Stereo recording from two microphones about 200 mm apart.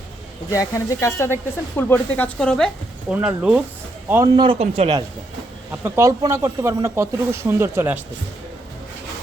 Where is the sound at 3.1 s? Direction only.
5° right (ahead or behind).